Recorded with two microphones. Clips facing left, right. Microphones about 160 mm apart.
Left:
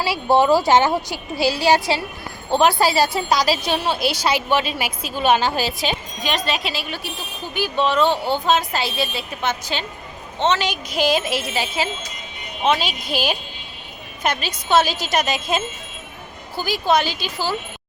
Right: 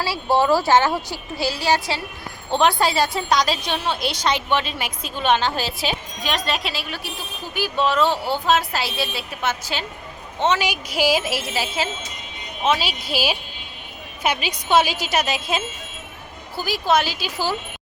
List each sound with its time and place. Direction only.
0.0 s a woman's voice: 15° left (ahead or behind); by 17.6 s 15° right (ahead or behind)